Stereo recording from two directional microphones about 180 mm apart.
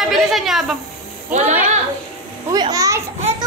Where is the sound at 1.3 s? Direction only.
40° right (ahead or behind).